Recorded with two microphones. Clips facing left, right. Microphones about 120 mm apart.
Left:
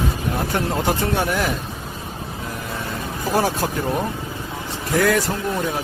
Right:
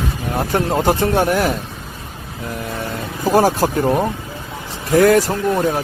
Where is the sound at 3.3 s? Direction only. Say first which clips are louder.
Right 6 dB; 40° right (ahead or behind).